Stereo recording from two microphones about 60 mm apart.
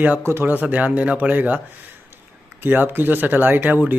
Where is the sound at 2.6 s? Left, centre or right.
Right.